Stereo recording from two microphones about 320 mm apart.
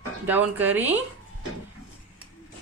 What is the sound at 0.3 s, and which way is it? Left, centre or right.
Speech, centre.